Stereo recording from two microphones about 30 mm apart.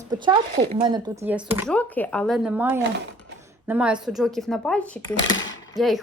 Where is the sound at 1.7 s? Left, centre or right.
Left.